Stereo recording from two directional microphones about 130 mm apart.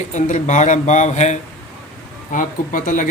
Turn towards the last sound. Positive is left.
turn(degrees=90)